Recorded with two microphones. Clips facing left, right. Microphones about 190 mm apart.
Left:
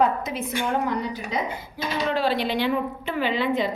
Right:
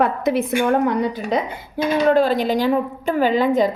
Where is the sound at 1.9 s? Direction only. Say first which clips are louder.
Right 8 dB; 50° right (ahead or behind).